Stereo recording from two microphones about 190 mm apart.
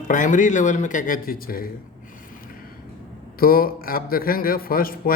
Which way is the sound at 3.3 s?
50° left (ahead or behind).